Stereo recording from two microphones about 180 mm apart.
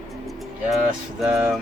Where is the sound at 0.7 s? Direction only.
Centre (ahead or behind).